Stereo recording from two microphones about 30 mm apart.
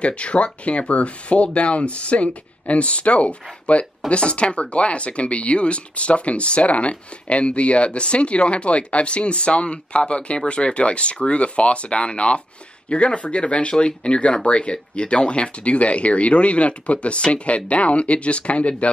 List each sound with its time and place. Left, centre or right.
0.0 s speech: left